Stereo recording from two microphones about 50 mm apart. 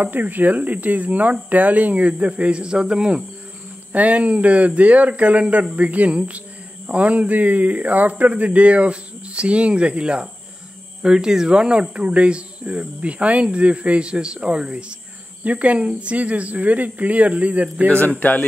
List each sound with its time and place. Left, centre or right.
0.0 s speech: right; by 3.3 s centre
3.9 s speech: right
18.0 s speech: left